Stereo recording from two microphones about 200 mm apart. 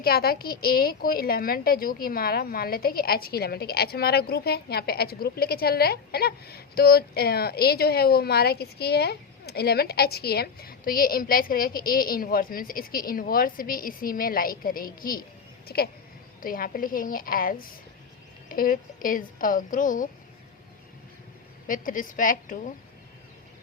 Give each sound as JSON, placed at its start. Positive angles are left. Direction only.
{"t": 0.0, "sound": "a woman's voice", "side_deg": 50}
{"t": 21.7, "sound": "a woman's voice", "side_deg": 40}